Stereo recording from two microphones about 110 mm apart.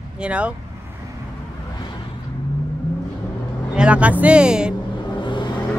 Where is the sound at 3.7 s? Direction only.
10° right (ahead or behind).